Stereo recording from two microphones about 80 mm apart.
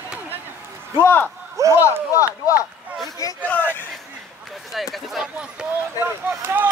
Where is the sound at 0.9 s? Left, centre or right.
Left.